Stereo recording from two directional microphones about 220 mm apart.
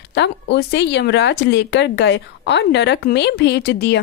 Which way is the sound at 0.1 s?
50° left (ahead or behind).